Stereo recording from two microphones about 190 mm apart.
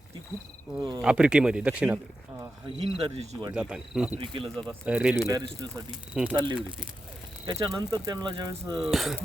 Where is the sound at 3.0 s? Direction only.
35° right (ahead or behind).